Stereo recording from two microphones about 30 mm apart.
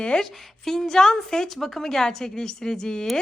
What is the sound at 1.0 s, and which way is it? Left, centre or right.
Speech, left.